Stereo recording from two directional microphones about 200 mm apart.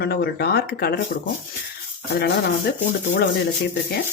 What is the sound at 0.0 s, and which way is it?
Speech, 55° left (ahead or behind).